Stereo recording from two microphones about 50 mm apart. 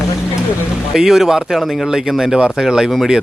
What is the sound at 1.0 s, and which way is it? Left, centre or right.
Speech, centre.